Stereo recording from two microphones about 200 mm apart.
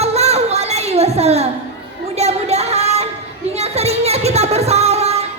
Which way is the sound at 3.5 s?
30° right (ahead or behind).